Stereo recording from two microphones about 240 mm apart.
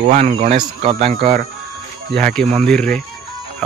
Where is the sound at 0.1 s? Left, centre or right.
Right.